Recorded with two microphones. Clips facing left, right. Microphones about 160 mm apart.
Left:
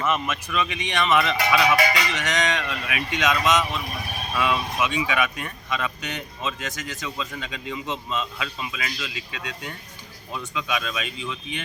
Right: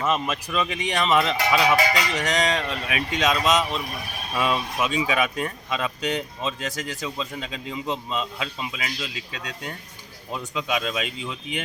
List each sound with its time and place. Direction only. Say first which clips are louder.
0.1 s speech: right 1 dB; 35° right (ahead or behind)